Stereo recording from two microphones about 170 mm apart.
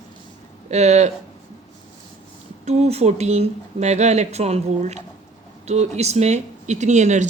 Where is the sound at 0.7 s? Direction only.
40° right (ahead or behind).